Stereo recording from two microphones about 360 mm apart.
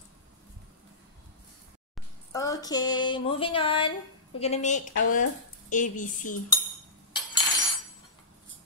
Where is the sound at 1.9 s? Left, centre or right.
Centre.